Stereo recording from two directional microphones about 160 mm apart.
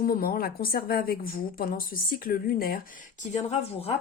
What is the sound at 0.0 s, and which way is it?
A woman's voice, 65° left (ahead or behind).